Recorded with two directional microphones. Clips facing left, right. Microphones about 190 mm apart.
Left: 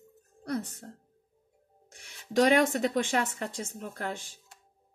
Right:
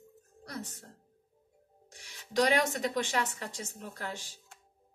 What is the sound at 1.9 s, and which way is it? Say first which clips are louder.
Speech: left 4 dB; 50° left (ahead or behind).